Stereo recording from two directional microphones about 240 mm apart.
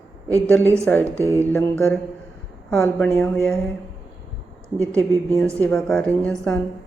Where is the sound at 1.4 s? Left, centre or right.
Centre.